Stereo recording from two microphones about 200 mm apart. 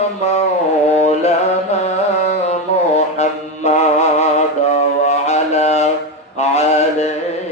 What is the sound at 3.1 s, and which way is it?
Mantra, 35° left (ahead or behind).